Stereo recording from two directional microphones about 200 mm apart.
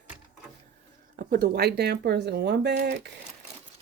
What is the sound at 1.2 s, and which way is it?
Speech, 50° right (ahead or behind).